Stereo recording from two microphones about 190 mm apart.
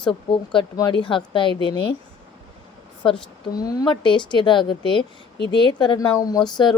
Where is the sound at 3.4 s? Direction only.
20° left (ahead or behind).